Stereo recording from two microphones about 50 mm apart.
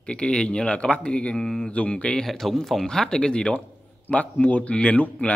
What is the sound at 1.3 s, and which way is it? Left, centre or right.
Speech, centre.